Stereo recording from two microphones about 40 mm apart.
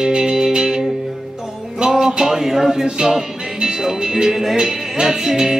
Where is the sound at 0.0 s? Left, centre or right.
Centre.